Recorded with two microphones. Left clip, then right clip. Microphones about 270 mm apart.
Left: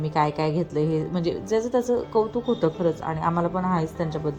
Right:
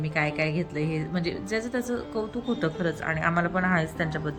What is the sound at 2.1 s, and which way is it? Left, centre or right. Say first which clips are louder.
A man's voice: left 7 dB; centre.